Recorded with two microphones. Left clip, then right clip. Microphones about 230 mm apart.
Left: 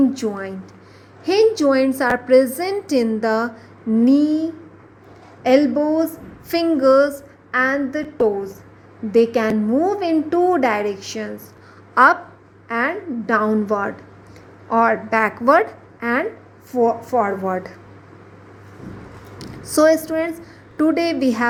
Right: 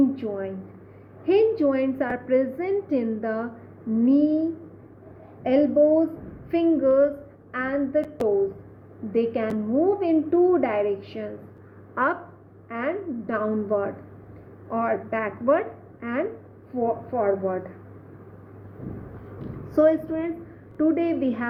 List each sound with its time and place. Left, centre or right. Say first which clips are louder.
0.1 s a woman's voice: left 5 dB; left
9.1 s a woman's voice: left 8 dB; left
12.6 s a woman's voice: left 7 dB; left
19.7 s a woman's voice: left 5 dB; left